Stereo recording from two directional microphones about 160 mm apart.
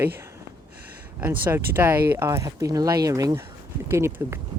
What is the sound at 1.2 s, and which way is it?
Speech, 15° right (ahead or behind).